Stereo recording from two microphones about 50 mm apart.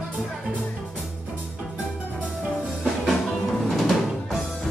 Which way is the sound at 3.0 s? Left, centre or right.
Centre.